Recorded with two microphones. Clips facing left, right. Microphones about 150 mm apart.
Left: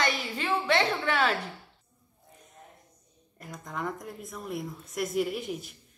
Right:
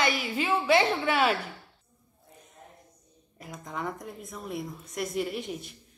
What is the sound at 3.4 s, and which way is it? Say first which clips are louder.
A woman's voice: even; centre (ahead or behind).